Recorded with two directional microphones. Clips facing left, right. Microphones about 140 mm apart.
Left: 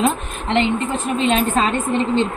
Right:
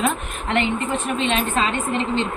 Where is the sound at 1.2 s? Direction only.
40° left (ahead or behind).